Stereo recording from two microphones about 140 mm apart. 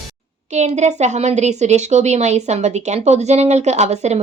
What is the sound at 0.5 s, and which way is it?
A woman's voice, 55° right (ahead or behind).